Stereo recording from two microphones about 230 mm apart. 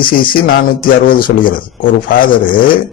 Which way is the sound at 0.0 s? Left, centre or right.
Left.